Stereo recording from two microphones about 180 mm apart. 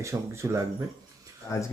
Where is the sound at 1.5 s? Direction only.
15° left (ahead or behind).